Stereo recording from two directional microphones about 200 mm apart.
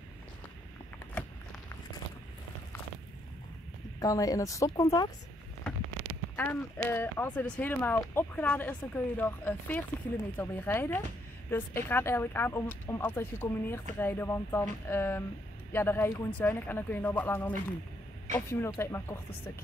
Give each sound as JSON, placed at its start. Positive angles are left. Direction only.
{"t": 4.0, "sound": "speech", "side_deg": 15}
{"t": 6.3, "sound": "speech", "side_deg": 10}